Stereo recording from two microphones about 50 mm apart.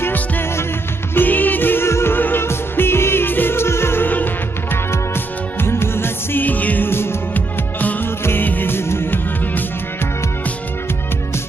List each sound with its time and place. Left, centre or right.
0.0 s music: left
1.1 s music: left
1.9 s music: left
2.1 s music: left
6.4 s music: left
6.9 s music: left
7.3 s music: left
8.2 s music: left